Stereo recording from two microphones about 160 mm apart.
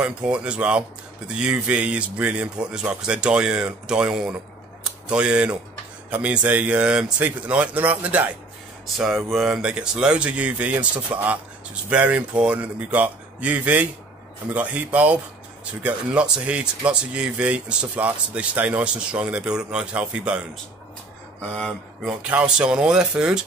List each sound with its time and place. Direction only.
0.0 s speech: 5° right (ahead or behind)
22.3 s speech: 5° right (ahead or behind)